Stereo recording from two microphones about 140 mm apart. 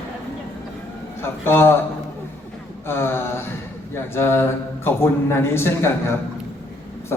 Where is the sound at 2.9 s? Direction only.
15° left (ahead or behind).